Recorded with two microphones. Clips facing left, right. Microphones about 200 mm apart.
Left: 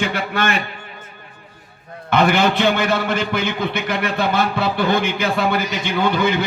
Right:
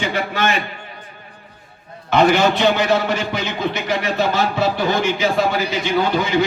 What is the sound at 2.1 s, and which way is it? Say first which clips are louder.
A man's voice: right 2 dB; 55° left (ahead or behind).